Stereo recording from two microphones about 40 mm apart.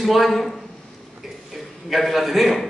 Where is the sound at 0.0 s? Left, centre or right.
Centre.